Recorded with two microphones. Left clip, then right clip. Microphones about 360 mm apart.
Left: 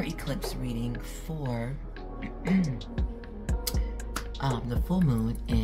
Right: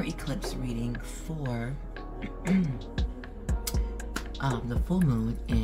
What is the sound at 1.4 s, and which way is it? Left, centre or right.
Speech, centre.